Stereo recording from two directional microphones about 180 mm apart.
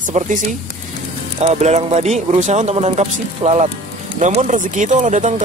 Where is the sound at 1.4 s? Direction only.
35° right (ahead or behind).